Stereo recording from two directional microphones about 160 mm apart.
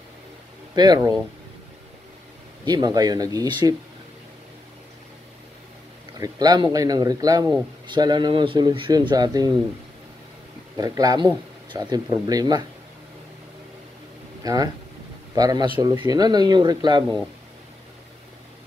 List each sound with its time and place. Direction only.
0.7 s speech: 25° right (ahead or behind)
2.6 s speech: 25° right (ahead or behind)
6.1 s speech: 25° right (ahead or behind)
10.8 s speech: 25° right (ahead or behind)
14.4 s speech: 20° right (ahead or behind)